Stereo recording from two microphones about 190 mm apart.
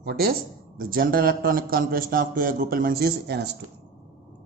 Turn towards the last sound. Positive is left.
turn(degrees=-60)  # may be behind; listen again after turning